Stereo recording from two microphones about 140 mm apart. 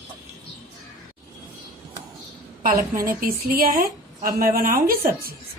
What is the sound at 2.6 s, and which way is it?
A woman's voice, 85° right.